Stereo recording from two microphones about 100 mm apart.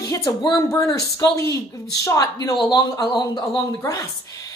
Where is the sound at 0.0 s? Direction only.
35° left (ahead or behind).